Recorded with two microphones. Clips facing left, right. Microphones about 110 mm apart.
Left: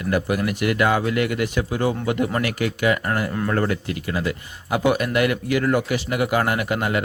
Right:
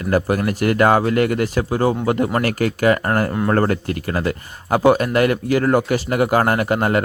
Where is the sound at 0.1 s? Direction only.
40° right (ahead or behind).